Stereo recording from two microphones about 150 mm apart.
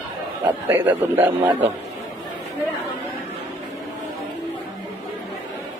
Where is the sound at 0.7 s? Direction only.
15° right (ahead or behind).